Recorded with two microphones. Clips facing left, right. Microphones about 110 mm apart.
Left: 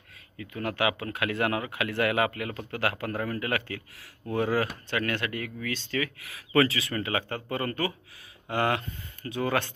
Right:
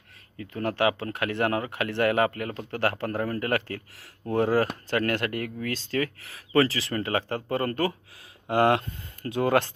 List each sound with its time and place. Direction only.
0.4 s speech: 35° right (ahead or behind)
3.3 s speech: 40° right (ahead or behind)
9.2 s speech: 45° right (ahead or behind)